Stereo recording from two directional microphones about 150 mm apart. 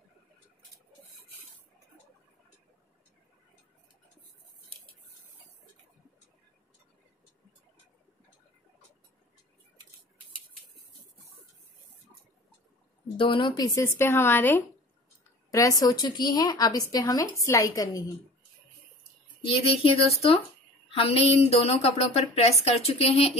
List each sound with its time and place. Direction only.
13.2 s speech: 35° left (ahead or behind)
13.7 s a woman's voice: 15° left (ahead or behind)
19.4 s speech: 40° left (ahead or behind)